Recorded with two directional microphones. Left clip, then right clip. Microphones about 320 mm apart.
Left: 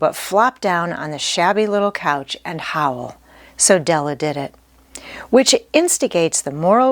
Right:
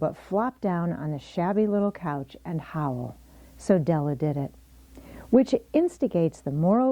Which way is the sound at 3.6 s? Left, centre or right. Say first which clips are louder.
Left 10 dB; centre.